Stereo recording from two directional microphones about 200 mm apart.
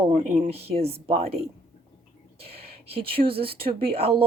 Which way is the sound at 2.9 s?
30° right (ahead or behind).